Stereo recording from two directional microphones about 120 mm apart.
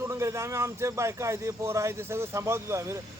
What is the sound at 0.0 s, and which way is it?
Speech, 25° right (ahead or behind).